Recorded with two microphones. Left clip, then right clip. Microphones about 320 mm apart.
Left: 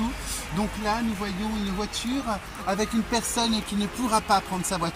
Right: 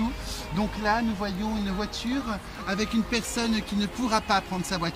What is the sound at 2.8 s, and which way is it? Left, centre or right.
Speech, centre.